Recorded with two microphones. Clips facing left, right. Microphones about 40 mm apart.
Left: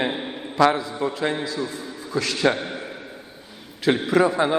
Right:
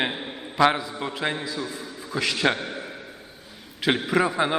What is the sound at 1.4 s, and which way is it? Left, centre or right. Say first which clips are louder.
Speech: left 3 dB; centre.